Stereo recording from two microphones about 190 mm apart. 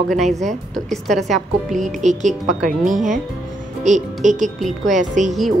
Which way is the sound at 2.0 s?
40° right (ahead or behind).